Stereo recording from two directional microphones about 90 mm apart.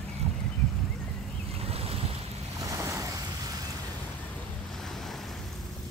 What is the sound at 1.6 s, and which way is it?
Boat, 90° right.